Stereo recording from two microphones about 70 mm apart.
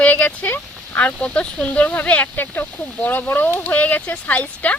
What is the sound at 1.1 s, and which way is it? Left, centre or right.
Speech, centre.